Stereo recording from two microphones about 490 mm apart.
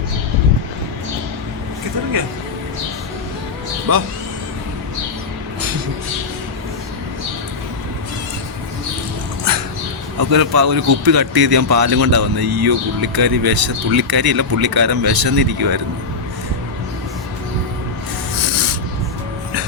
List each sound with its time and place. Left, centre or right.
3.9 s a man's voice: right
10.2 s a man's voice: right